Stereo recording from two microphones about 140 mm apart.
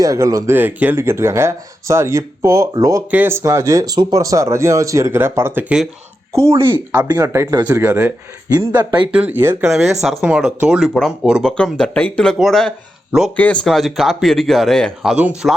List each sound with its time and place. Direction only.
0.0 s speech: 25° right (ahead or behind); by 5.9 s 5° right (ahead or behind)
6.3 s speech: 20° right (ahead or behind)
8.4 s speech: 30° right (ahead or behind)
9.1 s speech: 15° right (ahead or behind)
10.0 s speech: centre (ahead or behind)
11.5 s speech: 5° left (ahead or behind)
15.1 s speech: 5° right (ahead or behind)